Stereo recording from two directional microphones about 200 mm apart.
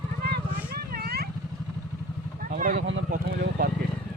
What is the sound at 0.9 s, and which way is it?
Vehicle, 50° right (ahead or behind).